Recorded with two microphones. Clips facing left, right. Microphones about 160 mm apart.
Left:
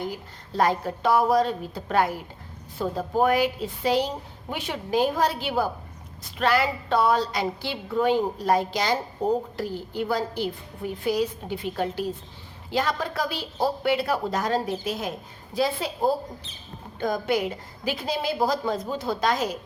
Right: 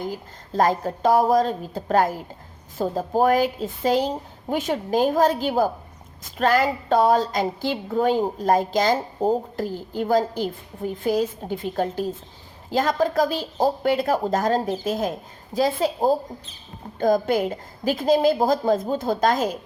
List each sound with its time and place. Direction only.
0.1 s a woman's voice: 45° right (ahead or behind)